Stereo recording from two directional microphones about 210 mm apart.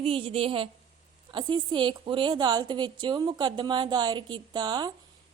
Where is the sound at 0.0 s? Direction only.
25° right (ahead or behind).